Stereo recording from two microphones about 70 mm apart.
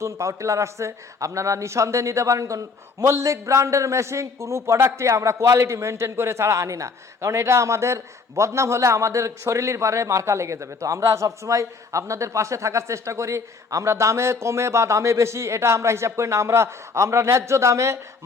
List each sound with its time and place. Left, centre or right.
0.0 s speech: right